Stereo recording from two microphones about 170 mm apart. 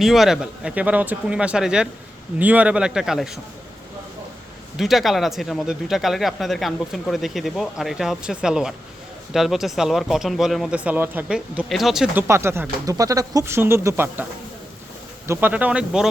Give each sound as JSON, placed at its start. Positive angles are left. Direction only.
{"t": 0.0, "sound": "speech", "side_deg": 0}
{"t": 4.8, "sound": "speech", "side_deg": 0}
{"t": 12.3, "sound": "speech", "side_deg": -15}
{"t": 15.3, "sound": "speech", "side_deg": -10}